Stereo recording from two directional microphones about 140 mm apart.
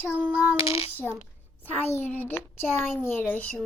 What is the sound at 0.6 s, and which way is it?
Speech, 45° left (ahead or behind).